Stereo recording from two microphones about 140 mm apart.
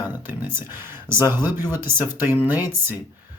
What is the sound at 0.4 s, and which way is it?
Speech, 15° right (ahead or behind).